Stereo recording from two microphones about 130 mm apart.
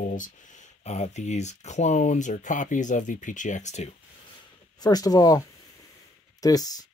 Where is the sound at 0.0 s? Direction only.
80° left; by 3.9 s 60° left (ahead or behind).